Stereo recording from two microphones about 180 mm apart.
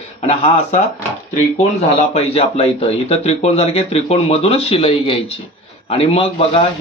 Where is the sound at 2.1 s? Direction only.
35° left (ahead or behind).